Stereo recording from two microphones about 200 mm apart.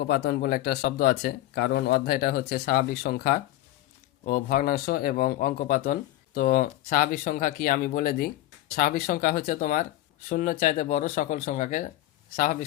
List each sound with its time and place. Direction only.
0.0 s speech: 50° left (ahead or behind)